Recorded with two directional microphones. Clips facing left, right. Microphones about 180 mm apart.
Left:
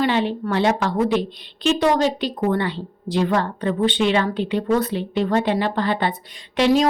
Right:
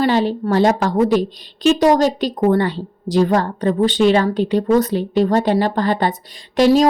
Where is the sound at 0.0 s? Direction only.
40° right (ahead or behind).